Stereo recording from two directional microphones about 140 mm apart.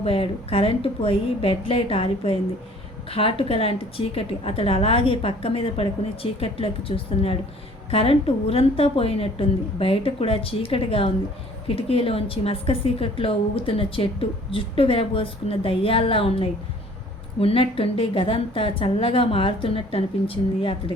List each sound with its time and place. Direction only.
0.0 s a woman's voice: 40° left (ahead or behind)